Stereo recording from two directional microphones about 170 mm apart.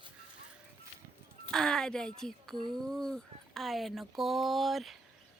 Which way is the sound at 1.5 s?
5° left (ahead or behind).